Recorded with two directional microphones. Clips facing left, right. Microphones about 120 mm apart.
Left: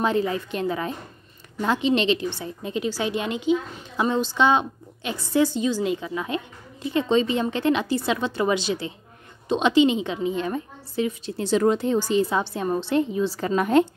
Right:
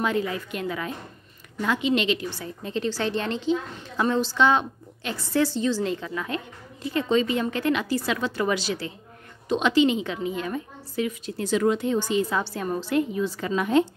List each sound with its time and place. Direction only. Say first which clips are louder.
0.0 s a woman's voice: left 3 dB; 30° left (ahead or behind)
13.5 s speech: left 2 dB; 45° left (ahead or behind)